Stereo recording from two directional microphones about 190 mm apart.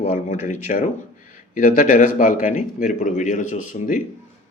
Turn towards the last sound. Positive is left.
turn(degrees=40)  # may be behind; listen again after turning